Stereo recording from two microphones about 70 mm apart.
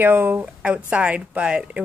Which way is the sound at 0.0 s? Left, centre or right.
Right.